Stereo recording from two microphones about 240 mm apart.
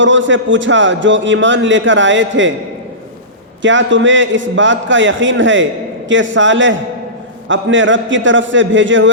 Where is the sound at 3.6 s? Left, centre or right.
Right.